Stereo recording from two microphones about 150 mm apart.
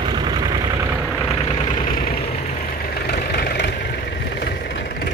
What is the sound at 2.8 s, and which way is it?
Vehicle, 90° left.